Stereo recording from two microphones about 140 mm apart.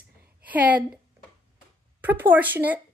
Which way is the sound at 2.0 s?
15° right (ahead or behind).